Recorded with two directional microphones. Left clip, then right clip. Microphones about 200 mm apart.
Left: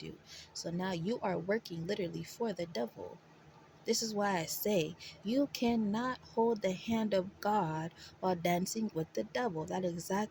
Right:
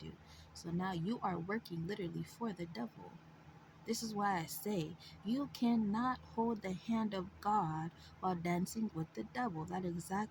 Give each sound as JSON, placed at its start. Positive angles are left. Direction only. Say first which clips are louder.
{"t": 0.0, "sound": "speech", "louder": "left 7 dB", "side_deg": 35}
{"t": 3.8, "sound": "speech", "louder": "left 4 dB", "side_deg": 35}